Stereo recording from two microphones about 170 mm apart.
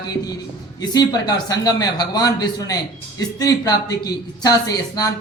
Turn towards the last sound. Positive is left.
turn(degrees=20)  # may be behind; listen again after turning